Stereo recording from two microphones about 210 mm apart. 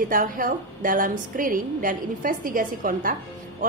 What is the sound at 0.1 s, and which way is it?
A woman's voice, 40° right (ahead or behind).